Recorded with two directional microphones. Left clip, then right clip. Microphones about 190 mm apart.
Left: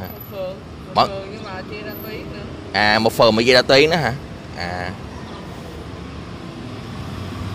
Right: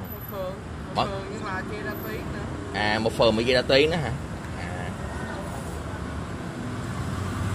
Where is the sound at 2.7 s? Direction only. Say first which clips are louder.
Left 9 dB; 40° left (ahead or behind).